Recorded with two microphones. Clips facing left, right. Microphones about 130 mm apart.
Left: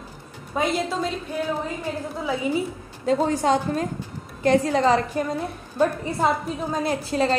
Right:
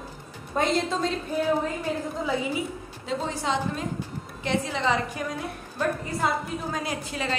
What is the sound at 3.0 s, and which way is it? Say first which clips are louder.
A woman's voice: left 9 dB; 45° left (ahead or behind).